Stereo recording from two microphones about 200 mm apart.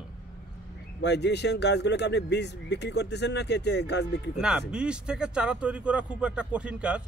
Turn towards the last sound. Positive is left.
turn(degrees=-5)  # may be behind; listen again after turning